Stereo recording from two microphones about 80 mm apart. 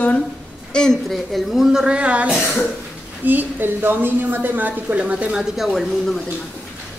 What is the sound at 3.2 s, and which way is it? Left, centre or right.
A woman's voice, right.